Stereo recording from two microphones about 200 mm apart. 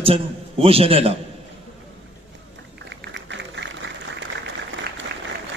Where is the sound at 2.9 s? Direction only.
60° right (ahead or behind).